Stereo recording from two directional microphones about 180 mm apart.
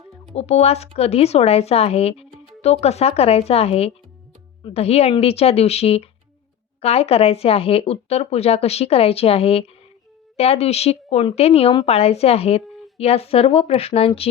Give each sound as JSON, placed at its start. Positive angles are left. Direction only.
{"t": 0.3, "sound": "speech", "side_deg": 35}